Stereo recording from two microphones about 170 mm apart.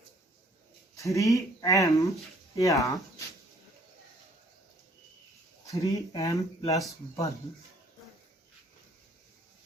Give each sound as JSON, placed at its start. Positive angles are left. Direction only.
{"t": 0.9, "sound": "speech", "side_deg": 20}
{"t": 5.6, "sound": "speech", "side_deg": 20}